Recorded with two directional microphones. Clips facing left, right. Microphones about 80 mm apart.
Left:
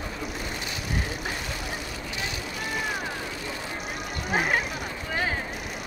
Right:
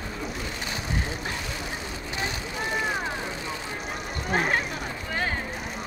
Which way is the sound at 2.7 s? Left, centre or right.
Right.